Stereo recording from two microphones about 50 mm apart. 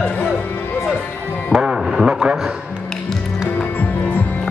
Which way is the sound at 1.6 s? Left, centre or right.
Centre.